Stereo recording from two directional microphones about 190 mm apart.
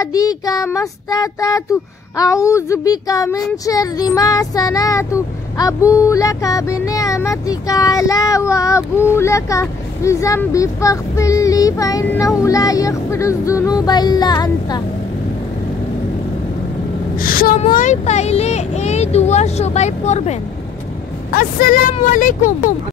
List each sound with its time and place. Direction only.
0.0 s child singing: 20° left (ahead or behind)
17.2 s a sound: 50° left (ahead or behind)
17.7 s speech: 40° left (ahead or behind)
21.3 s speech: 50° left (ahead or behind)